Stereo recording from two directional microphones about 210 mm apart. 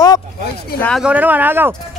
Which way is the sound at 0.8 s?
5° left (ahead or behind).